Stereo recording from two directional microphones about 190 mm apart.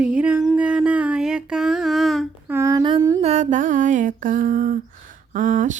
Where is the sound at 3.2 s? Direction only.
35° right (ahead or behind).